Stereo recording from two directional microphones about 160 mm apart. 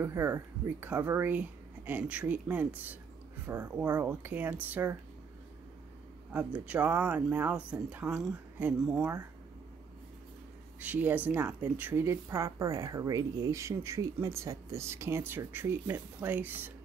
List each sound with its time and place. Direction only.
0.0 s speech: 15° right (ahead or behind)
6.3 s speech: 10° right (ahead or behind)
10.8 s speech: 10° right (ahead or behind)